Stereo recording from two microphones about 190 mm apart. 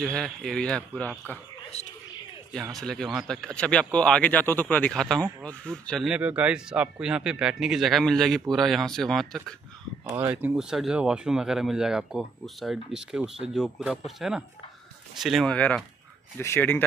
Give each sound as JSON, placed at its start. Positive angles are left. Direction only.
{"t": 0.0, "sound": "speech", "side_deg": 5}
{"t": 1.7, "sound": "speech", "side_deg": 35}
{"t": 2.5, "sound": "speech", "side_deg": 0}
{"t": 10.0, "sound": "speech", "side_deg": -10}